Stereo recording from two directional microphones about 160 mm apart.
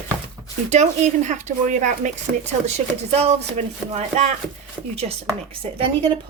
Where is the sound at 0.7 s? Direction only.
45° right (ahead or behind).